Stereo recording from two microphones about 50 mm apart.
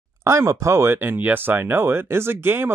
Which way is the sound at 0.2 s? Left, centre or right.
Right.